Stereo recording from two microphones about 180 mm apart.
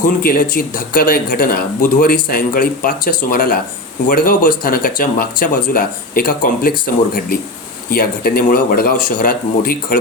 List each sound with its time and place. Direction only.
0.0 s speech: 55° left (ahead or behind)